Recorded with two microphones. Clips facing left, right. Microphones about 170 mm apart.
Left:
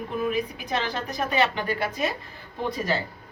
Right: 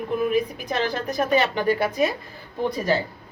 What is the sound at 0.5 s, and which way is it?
Speech, 45° right (ahead or behind).